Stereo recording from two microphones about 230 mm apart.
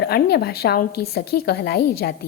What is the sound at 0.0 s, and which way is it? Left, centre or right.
A woman's voice, left.